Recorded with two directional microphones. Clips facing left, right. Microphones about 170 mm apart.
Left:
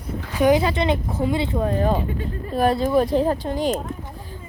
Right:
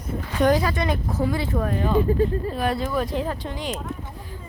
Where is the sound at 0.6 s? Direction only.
25° left (ahead or behind).